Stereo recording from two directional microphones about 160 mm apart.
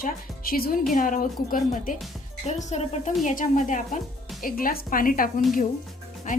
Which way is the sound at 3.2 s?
55° left (ahead or behind).